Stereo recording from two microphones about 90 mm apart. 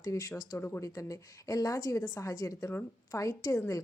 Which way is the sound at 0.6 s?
20° left (ahead or behind).